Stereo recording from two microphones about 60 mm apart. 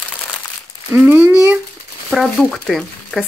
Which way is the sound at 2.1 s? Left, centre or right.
Centre.